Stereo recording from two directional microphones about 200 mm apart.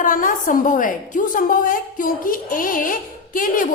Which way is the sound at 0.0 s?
40° left (ahead or behind).